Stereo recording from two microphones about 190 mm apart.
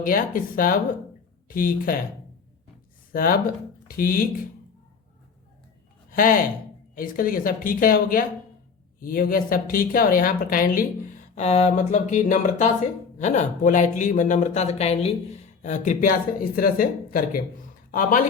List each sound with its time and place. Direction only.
0.0 s speech: 45° left (ahead or behind)
3.1 s speech: 50° left (ahead or behind)
6.1 s speech: 45° left (ahead or behind)